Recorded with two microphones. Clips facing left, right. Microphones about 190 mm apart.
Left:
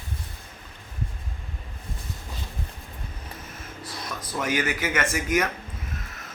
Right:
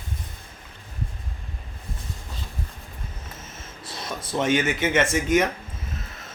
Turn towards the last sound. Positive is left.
turn(degrees=-25)  # may be behind; listen again after turning